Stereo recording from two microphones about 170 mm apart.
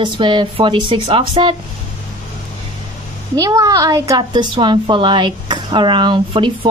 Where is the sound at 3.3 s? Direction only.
20° right (ahead or behind).